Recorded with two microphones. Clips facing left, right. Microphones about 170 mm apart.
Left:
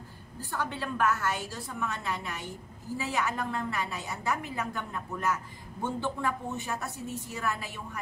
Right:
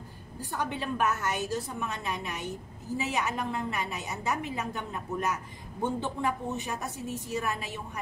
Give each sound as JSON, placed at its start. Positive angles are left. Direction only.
{"t": 0.4, "sound": "a woman's voice", "side_deg": -15}